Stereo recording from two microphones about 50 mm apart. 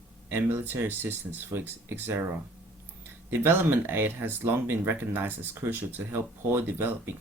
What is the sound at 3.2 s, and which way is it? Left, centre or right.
Speech, right.